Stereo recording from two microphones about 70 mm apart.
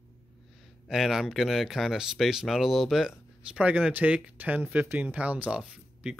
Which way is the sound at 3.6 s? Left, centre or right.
Right.